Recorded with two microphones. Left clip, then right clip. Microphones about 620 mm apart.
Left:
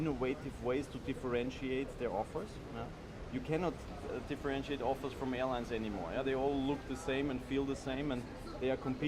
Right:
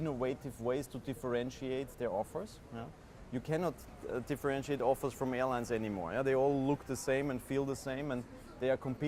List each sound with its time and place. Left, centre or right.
0.0 s speech: right
3.5 s speech: right
4.3 s speech: right